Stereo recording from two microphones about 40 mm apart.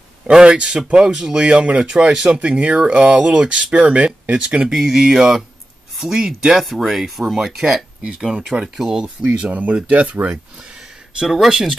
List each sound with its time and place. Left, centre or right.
0.3 s speech: right
4.6 s speech: centre
6.6 s speech: centre
8.7 s speech: centre
9.3 s speech: right
11.2 s speech: centre